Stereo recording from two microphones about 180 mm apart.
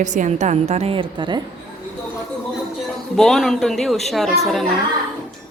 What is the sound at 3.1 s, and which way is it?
A man's voice, centre (ahead or behind).